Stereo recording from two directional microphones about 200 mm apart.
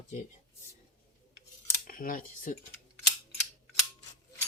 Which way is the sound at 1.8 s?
45° left (ahead or behind).